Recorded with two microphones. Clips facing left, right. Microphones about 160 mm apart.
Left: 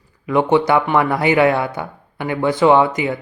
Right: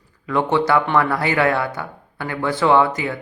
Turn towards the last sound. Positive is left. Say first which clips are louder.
# left 3 dB
turn(degrees=20)  # may be behind; listen again after turning